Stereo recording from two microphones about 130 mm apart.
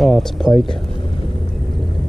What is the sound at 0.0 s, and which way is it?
Speech, centre (ahead or behind).